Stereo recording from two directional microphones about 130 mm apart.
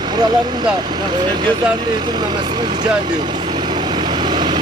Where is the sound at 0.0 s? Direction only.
30° right (ahead or behind).